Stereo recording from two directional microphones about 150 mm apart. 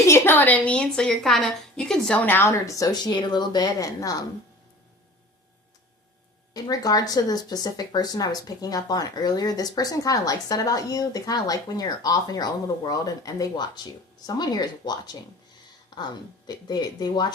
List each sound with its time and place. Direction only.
0.1 s a woman's voice: 15° left (ahead or behind)
6.5 s speech: 25° left (ahead or behind)